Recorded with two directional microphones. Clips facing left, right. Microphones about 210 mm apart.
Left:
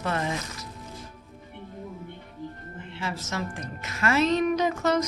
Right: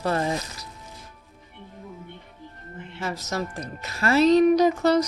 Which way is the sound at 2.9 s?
40° right (ahead or behind).